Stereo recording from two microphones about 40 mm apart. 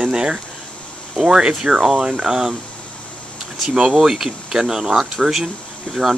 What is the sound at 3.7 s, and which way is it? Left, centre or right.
Speech, centre.